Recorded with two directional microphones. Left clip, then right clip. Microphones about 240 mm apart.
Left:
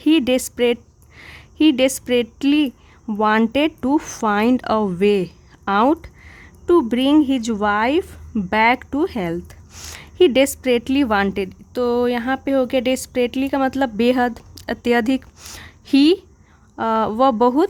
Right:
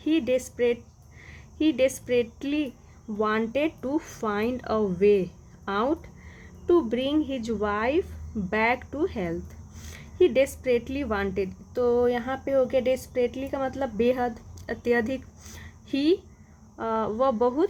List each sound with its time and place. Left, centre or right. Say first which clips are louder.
0.1 s a woman's voice: left 8 dB; left